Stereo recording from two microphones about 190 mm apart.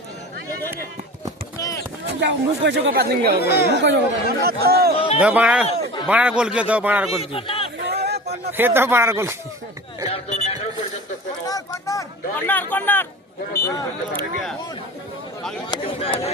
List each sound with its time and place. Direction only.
1.5 s a sound: 15° left (ahead or behind)
2.2 s speech: 65° right (ahead or behind)
3.4 s speech: 55° left (ahead or behind)
3.8 s speech: 65° right (ahead or behind)
4.9 s a man's voice: 30° left (ahead or behind)
5.2 s a man's voice: 5° right (ahead or behind)
7.2 s a man's voice: 30° left (ahead or behind)
7.9 s a sound: 60° right (ahead or behind)
8.5 s a man's voice: 10° right (ahead or behind)
10.1 s a sound: 35° left (ahead or behind)
11.4 s speech: 20° left (ahead or behind)
15.7 s speech: 30° left (ahead or behind)